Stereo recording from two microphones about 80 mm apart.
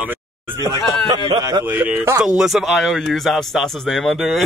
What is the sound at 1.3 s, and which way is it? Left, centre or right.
Speech, right.